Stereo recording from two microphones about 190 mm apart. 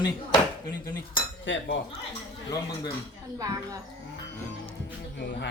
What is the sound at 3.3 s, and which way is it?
Speech, 20° right (ahead or behind).